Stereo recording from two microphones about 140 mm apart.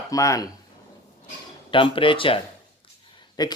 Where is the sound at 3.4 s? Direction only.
30° left (ahead or behind).